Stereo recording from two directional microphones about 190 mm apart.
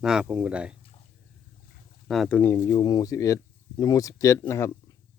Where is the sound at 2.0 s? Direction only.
Centre (ahead or behind).